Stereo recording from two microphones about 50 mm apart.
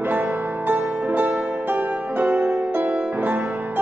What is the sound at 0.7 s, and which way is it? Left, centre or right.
Music, right.